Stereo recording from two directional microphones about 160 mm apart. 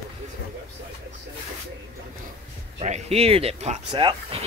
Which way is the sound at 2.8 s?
40° right (ahead or behind).